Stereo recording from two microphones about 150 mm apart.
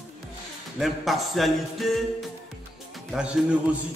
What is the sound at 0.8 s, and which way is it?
Speech, centre (ahead or behind).